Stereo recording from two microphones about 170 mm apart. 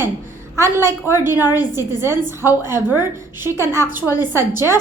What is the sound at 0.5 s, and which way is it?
A woman's voice, 15° right (ahead or behind).